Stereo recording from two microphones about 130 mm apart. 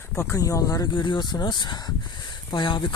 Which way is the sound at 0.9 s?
40° left (ahead or behind).